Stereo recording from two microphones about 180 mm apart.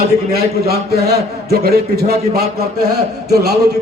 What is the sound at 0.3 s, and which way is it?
A man's voice, 60° right (ahead or behind).